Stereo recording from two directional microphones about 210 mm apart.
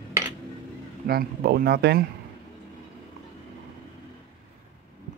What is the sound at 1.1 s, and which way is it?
Speech, 45° right (ahead or behind).